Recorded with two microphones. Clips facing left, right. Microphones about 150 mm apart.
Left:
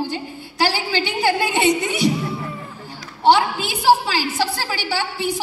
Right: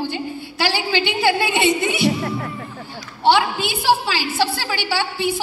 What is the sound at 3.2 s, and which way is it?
A woman's voice, 40° left (ahead or behind).